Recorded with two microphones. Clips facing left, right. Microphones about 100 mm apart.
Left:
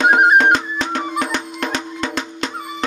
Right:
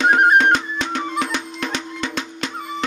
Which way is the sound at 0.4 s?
40° left (ahead or behind).